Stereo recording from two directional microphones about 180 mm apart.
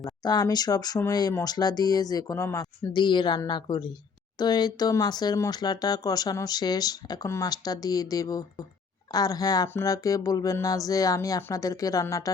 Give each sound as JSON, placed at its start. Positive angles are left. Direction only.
{"t": 0.0, "sound": "speech", "side_deg": 20}